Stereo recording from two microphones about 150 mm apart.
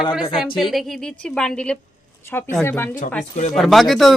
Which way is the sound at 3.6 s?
Centre (ahead or behind).